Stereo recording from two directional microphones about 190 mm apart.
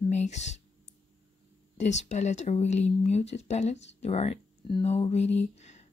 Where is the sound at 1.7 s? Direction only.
35° left (ahead or behind).